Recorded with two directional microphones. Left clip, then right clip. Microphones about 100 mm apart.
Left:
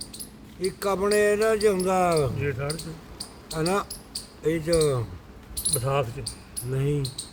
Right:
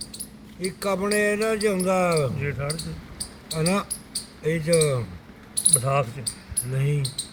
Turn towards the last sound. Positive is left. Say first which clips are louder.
# left 2 dB
turn(degrees=35)  # may be behind; listen again after turning